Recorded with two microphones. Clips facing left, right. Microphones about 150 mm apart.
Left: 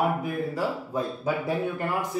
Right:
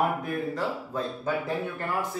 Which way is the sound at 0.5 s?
10° left (ahead or behind).